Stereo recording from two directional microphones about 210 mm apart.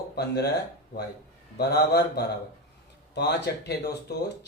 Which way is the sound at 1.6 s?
50° left (ahead or behind).